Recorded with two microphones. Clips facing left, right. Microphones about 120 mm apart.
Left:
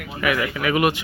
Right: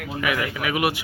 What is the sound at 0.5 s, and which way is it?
Speech, 10° right (ahead or behind).